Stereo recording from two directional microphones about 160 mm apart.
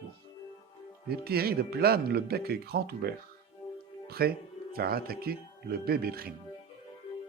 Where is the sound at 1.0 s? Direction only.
75° right (ahead or behind).